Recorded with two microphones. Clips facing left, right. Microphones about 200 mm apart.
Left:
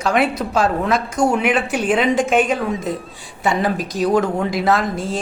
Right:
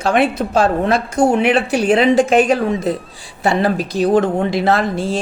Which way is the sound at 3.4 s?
30° right (ahead or behind).